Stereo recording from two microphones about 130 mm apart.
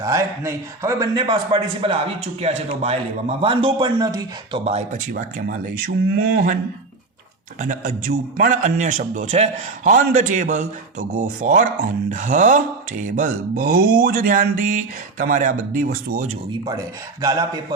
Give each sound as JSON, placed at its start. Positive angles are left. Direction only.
{"t": 0.0, "sound": "a man's voice", "side_deg": -25}
{"t": 2.4, "sound": "a man's voice", "side_deg": -50}
{"t": 4.6, "sound": "speech", "side_deg": -55}
{"t": 4.9, "sound": "speech", "side_deg": -90}
{"t": 7.6, "sound": "a man's voice", "side_deg": -90}
{"t": 16.5, "sound": "a man's voice", "side_deg": -30}